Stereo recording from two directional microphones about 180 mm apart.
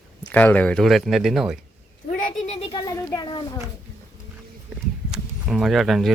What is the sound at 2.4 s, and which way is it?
Speech, 35° left (ahead or behind).